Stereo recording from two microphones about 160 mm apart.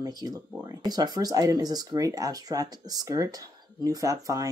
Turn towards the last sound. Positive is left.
turn(degrees=-20)  # may be behind; listen again after turning